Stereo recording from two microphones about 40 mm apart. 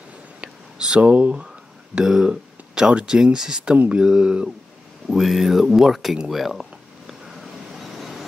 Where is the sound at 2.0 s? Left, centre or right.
Right.